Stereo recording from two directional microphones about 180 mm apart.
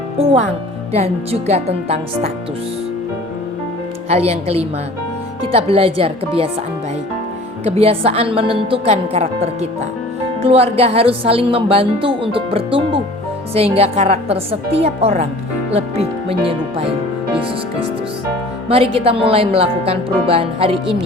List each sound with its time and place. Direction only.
0.9 s a woman's voice: 35° right (ahead or behind)
4.1 s a woman's voice: 35° right (ahead or behind)
7.6 s a woman's voice: 30° right (ahead or behind)
18.7 s a woman's voice: 30° right (ahead or behind)